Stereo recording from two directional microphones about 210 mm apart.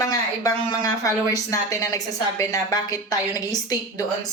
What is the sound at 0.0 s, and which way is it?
Speech, 15° left (ahead or behind).